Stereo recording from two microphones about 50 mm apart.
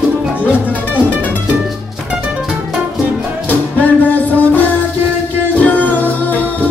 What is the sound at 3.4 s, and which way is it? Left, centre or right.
Music, left.